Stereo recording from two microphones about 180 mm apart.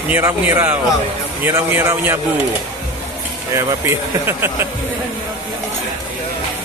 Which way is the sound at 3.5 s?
15° right (ahead or behind).